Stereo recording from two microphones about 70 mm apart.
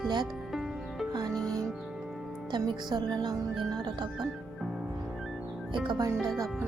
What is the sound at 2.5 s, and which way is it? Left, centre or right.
Speech, right.